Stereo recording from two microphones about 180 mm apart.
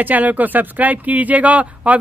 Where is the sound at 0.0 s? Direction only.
10° right (ahead or behind).